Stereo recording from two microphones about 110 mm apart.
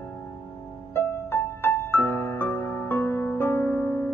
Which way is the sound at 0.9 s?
20° left (ahead or behind).